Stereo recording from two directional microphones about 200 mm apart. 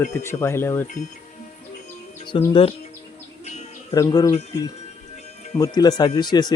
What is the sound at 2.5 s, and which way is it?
Speech, 25° left (ahead or behind).